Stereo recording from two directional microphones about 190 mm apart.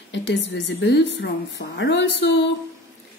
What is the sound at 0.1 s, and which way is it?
Speech, 70° left (ahead or behind).